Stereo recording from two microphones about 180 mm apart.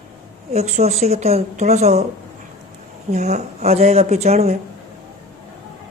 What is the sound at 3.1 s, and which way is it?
Speech, 40° right (ahead or behind).